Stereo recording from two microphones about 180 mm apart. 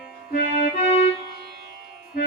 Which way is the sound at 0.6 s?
40° left (ahead or behind).